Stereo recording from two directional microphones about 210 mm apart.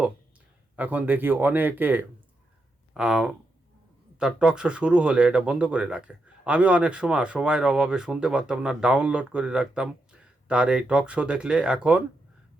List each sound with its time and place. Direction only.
0.8 s speech: 10° right (ahead or behind)